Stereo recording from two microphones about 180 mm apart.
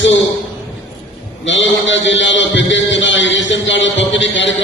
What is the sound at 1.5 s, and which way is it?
A man's voice, 90° left.